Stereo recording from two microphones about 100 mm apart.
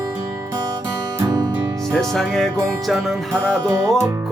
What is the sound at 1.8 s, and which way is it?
Music, 5° left (ahead or behind).